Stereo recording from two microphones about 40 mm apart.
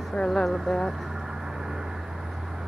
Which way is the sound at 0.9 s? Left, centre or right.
Centre.